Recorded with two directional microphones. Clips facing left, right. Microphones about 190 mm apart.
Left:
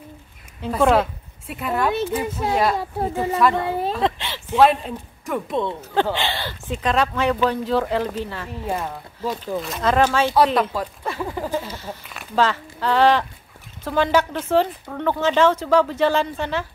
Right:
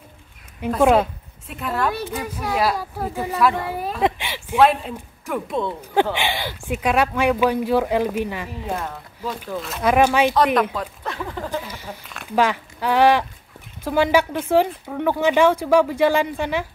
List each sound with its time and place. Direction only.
0.7 s speech: 5° right (ahead or behind)
2.2 s a woman's voice: 25° left (ahead or behind)
2.5 s speech: 5° right (ahead or behind)
2.8 s a woman's voice: 25° left (ahead or behind)
3.3 s speech: centre (ahead or behind)
3.5 s a woman's voice: 25° left (ahead or behind)
4.0 s a sound: 10° right (ahead or behind)
4.6 s speech: centre (ahead or behind)
6.1 s speech: 15° right (ahead or behind)
8.6 s speech: 5° left (ahead or behind)
9.8 s speech: 15° right (ahead or behind)
10.7 s speech: 5° left (ahead or behind)
11.7 s speech: 15° right (ahead or behind)